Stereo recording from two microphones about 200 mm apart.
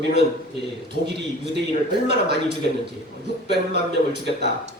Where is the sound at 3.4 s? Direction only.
55° right (ahead or behind).